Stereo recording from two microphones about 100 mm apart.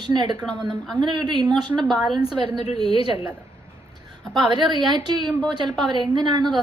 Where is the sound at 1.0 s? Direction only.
50° right (ahead or behind).